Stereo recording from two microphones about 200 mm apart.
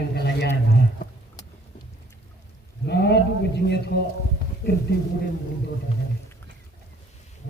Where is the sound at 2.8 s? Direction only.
55° left (ahead or behind).